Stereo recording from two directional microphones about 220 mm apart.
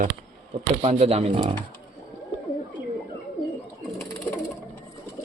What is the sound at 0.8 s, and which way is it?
Speech, 30° right (ahead or behind).